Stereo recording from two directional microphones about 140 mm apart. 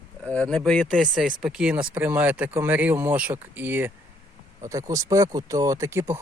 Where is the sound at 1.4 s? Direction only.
5° right (ahead or behind).